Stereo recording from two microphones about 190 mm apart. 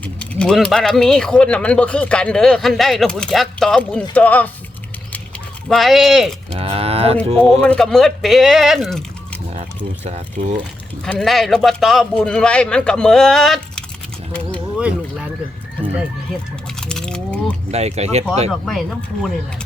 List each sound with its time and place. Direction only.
0.0 s speech: 5° left (ahead or behind)
5.6 s speech: centre (ahead or behind)
6.5 s speech: 30° right (ahead or behind)
7.6 s speech: 5° left (ahead or behind)
9.5 s speech: 35° right (ahead or behind)
11.0 s speech: 5° left (ahead or behind)
16.8 s a sound: 5° left (ahead or behind)
17.7 s speech: 35° right (ahead or behind)
18.6 s speech: centre (ahead or behind)